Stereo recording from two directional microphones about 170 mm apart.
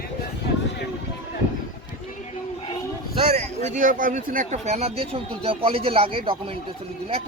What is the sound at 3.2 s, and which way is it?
A man's voice, 35° right (ahead or behind).